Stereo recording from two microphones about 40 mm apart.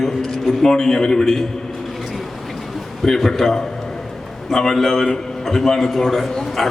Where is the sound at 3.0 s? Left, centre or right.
Centre.